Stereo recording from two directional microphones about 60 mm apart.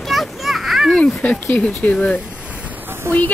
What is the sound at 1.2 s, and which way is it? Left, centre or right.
Speech, left.